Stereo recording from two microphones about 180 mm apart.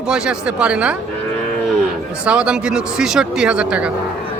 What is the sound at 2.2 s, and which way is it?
Speech, 5° right (ahead or behind).